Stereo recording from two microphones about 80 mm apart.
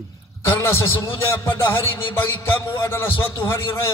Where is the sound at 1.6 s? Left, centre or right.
Left.